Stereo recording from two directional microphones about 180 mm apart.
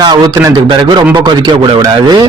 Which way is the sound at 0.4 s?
25° right (ahead or behind).